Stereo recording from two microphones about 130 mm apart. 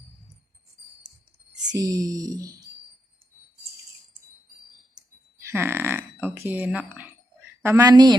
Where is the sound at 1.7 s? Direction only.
30° right (ahead or behind).